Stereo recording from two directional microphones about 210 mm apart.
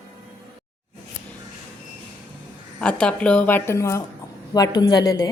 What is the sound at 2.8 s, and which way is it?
A woman's voice, 5° left (ahead or behind).